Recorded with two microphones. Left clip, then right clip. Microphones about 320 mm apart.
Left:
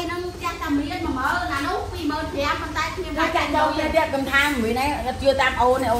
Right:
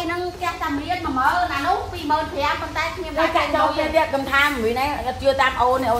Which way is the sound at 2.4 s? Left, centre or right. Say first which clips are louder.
Right 1 dB; right.